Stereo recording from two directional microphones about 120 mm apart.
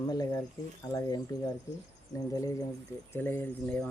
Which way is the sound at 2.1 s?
30° left (ahead or behind).